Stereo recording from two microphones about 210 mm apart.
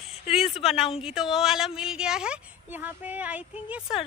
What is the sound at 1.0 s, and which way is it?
Speech, centre (ahead or behind).